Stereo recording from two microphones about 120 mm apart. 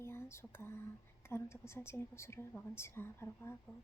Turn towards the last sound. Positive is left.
turn(degrees=20)  # may be behind; listen again after turning